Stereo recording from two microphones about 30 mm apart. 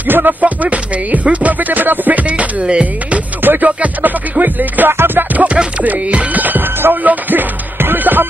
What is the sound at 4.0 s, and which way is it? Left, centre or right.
Music, right.